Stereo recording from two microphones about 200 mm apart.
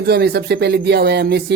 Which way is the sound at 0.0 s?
55° right (ahead or behind).